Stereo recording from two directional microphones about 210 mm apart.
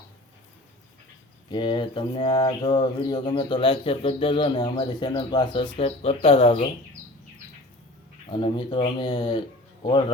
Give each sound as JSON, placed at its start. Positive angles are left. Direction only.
{"t": 1.5, "sound": "bird", "side_deg": 20}
{"t": 8.3, "sound": "bird", "side_deg": 25}